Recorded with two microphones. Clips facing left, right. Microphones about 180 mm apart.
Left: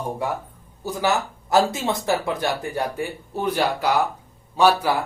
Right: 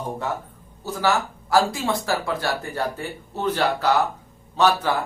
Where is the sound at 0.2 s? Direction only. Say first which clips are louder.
Left 1 dB; 10° left (ahead or behind).